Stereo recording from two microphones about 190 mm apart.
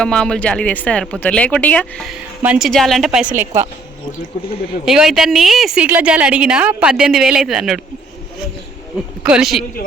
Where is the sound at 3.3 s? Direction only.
35° right (ahead or behind).